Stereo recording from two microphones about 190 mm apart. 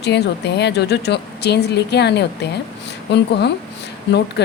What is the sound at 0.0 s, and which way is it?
A woman's voice, 65° left (ahead or behind).